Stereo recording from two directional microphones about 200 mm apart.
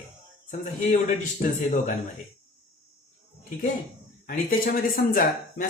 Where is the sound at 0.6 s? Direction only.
40° left (ahead or behind).